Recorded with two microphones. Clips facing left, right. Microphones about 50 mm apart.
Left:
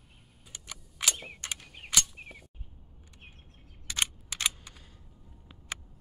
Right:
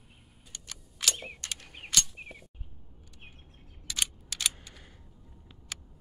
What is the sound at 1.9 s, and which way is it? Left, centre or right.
Arrow, centre.